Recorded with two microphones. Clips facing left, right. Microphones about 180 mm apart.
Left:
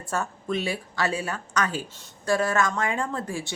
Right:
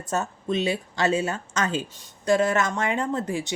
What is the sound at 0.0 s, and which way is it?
A woman's voice, 20° right (ahead or behind).